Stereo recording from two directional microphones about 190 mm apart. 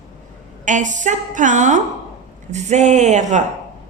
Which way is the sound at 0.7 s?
40° right (ahead or behind).